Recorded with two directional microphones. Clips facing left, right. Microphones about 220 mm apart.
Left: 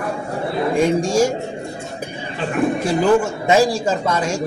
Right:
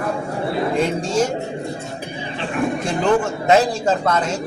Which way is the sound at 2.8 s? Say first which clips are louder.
Left 3 dB; 5° left (ahead or behind).